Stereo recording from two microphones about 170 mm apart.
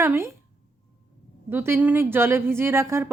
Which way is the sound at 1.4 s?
15° right (ahead or behind).